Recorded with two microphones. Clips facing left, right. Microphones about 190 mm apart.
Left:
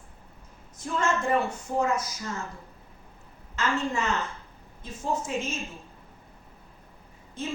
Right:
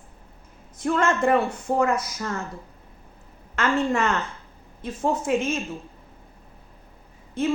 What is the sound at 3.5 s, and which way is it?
A woman's voice, 55° right (ahead or behind).